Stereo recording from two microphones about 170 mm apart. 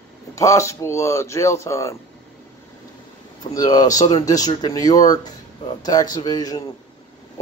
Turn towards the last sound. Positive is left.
turn(degrees=20)  # may be behind; listen again after turning